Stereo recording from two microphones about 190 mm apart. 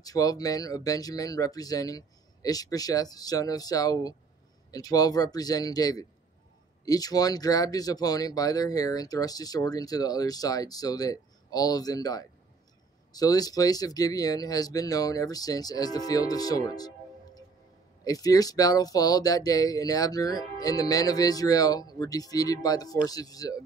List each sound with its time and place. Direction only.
0.0 s speech: 20° left (ahead or behind)